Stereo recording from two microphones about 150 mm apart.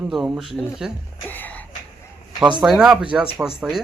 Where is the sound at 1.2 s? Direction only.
10° left (ahead or behind).